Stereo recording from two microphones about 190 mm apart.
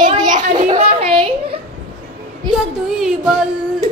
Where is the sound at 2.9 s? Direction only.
5° right (ahead or behind).